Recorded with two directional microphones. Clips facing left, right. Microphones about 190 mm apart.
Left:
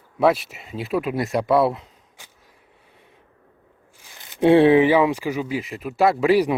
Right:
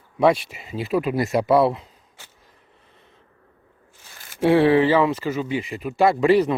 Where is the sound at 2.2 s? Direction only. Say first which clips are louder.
Even; 15° left (ahead or behind).